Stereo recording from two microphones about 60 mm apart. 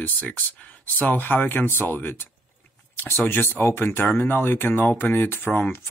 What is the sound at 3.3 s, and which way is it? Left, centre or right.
Speech, left.